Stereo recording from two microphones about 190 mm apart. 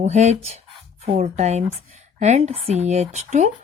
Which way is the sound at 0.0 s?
35° right (ahead or behind).